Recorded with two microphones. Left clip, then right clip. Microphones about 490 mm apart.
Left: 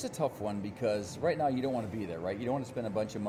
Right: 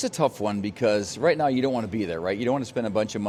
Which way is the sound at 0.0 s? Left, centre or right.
Right.